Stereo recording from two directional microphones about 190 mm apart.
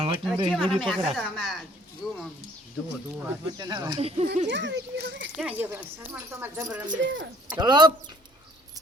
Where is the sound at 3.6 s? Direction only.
20° right (ahead or behind).